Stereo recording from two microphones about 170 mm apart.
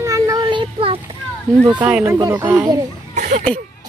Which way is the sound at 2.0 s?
20° right (ahead or behind).